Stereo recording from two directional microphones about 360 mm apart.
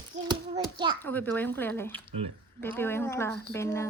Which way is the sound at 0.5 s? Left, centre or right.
Centre.